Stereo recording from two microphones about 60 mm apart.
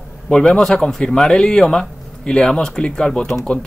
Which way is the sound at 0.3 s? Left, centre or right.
Centre.